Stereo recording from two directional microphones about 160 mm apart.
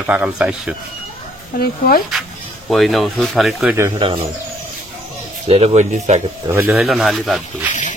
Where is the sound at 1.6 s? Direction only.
70° left (ahead or behind).